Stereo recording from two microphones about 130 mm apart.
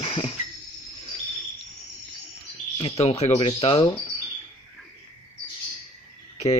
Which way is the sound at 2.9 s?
55° left (ahead or behind).